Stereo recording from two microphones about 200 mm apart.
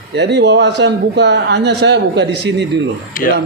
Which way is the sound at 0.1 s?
60° right (ahead or behind).